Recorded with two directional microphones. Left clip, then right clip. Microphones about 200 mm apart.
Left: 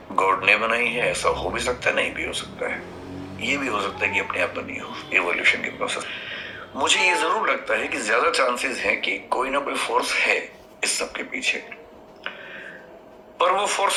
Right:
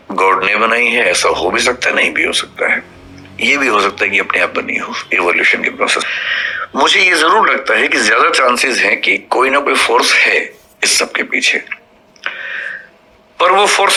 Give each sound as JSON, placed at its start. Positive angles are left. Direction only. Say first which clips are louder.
{"t": 0.2, "sound": "speech", "louder": "right 7 dB", "side_deg": -50}
{"t": 12.2, "sound": "a sound", "louder": "right 14 dB", "side_deg": -55}
{"t": 13.4, "sound": "speech", "louder": "right 11 dB", "side_deg": -50}